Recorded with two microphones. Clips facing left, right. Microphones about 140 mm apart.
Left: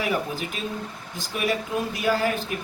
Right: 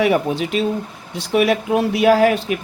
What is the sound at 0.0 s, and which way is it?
Speech, 70° right (ahead or behind).